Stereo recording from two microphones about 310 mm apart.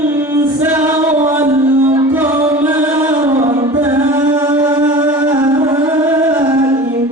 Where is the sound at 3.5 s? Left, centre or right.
Centre.